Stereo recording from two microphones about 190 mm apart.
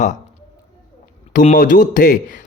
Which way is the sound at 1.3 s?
45° left (ahead or behind).